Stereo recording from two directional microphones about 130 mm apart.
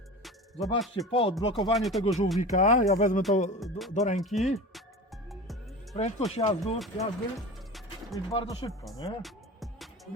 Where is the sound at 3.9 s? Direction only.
65° left (ahead or behind).